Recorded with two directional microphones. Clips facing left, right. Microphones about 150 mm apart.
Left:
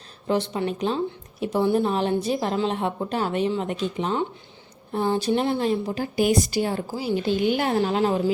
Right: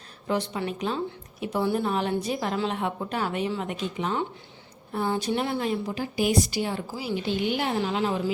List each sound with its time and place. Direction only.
0.3 s a woman's voice: 30° left (ahead or behind)
6.0 s a woman's voice: 45° left (ahead or behind)